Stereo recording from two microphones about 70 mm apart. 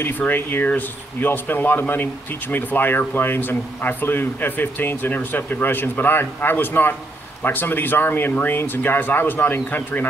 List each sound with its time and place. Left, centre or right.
0.0 s speech: left